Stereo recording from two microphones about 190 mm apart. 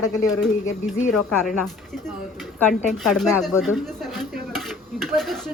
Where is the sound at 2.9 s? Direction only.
Centre (ahead or behind).